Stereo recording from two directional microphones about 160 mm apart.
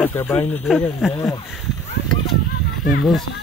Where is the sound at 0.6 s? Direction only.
Centre (ahead or behind).